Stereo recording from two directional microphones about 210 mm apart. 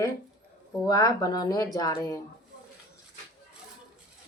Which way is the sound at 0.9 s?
15° left (ahead or behind).